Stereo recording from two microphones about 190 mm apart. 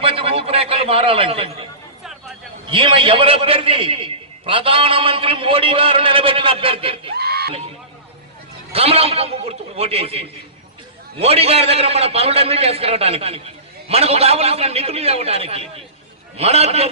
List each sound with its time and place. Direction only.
0.0 s a man's voice: 30° right (ahead or behind)
2.7 s a man's voice: 25° right (ahead or behind)
7.2 s a sound: 55° right (ahead or behind)
8.7 s a man's voice: 30° right (ahead or behind)